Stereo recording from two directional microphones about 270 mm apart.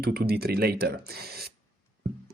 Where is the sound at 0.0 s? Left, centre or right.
Right.